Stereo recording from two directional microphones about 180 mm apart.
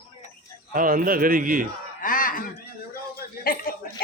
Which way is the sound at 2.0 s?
50° left (ahead or behind).